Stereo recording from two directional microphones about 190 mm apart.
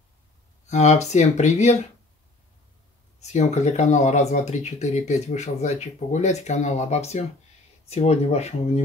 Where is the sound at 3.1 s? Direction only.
35° left (ahead or behind).